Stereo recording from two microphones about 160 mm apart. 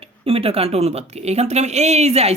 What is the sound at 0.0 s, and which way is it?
A woman's voice, 35° right (ahead or behind).